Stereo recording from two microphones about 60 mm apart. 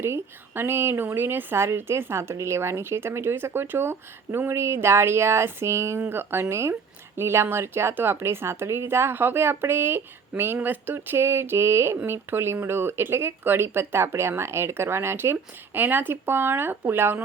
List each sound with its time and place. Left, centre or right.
0.0 s speech: right
6.1 s speech: right